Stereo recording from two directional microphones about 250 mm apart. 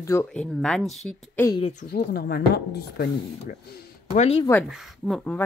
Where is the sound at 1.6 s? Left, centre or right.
Left.